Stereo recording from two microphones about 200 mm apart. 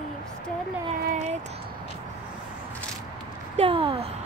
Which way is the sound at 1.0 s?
40° right (ahead or behind).